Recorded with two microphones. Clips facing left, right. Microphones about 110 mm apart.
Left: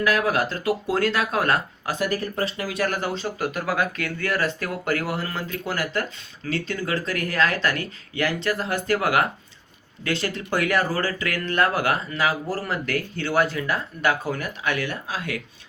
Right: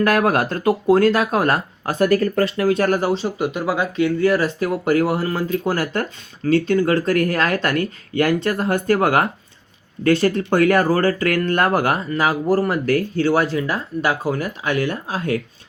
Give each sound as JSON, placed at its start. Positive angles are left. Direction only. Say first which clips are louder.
{"t": 0.0, "sound": "speech", "louder": "right 5 dB", "side_deg": -50}
{"t": 6.4, "sound": "speech", "louder": "right 11 dB", "side_deg": -45}